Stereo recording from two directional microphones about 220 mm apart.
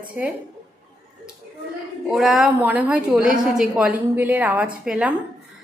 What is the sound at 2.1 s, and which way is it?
A woman's voice, centre (ahead or behind).